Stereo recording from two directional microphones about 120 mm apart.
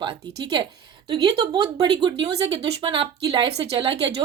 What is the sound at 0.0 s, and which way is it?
Speech, 40° right (ahead or behind).